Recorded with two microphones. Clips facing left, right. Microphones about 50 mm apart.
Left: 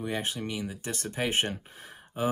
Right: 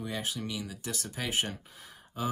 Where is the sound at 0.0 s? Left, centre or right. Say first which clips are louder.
Left 3 dB; left.